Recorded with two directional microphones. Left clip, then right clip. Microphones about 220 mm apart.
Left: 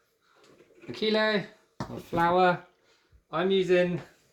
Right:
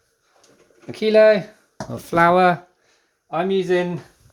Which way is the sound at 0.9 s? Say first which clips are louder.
Right 13 dB; 50° right (ahead or behind).